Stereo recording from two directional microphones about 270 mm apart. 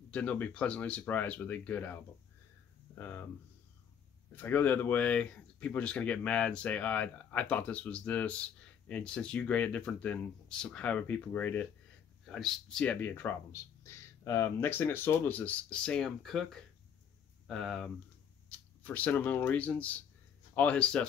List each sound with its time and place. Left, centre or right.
0.1 s speech: centre
3.0 s speech: centre
4.4 s speech: centre